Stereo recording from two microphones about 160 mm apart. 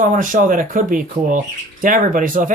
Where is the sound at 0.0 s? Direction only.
55° right (ahead or behind).